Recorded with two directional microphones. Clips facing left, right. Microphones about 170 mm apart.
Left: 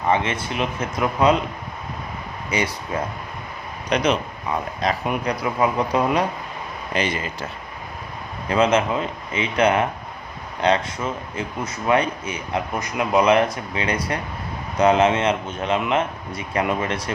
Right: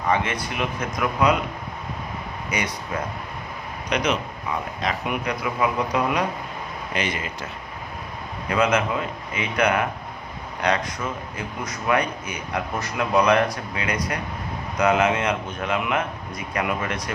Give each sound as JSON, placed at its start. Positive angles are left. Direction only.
{"t": 0.1, "sound": "speech", "side_deg": 25}
{"t": 2.5, "sound": "speech", "side_deg": 30}
{"t": 3.8, "sound": "speech", "side_deg": 30}
{"t": 8.4, "sound": "speech", "side_deg": 30}